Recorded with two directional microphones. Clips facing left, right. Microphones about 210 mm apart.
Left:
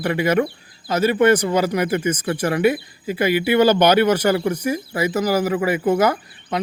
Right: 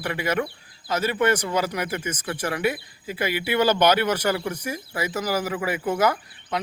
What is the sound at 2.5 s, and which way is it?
Speech, 20° left (ahead or behind).